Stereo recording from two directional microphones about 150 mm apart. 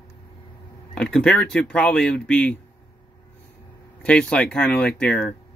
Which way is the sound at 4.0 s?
10° left (ahead or behind).